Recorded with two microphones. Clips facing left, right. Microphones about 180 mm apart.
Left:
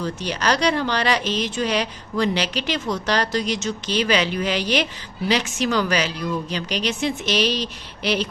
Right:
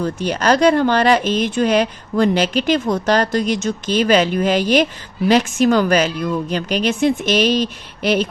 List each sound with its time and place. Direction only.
0.0 s speech: 50° right (ahead or behind)